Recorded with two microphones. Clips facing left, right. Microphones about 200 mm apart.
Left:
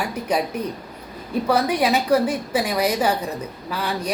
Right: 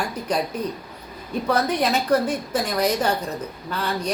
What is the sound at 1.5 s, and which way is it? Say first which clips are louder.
Speech: left 2 dB; 10° left (ahead or behind).